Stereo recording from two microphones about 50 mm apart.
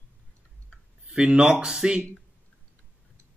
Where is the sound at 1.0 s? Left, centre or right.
Centre.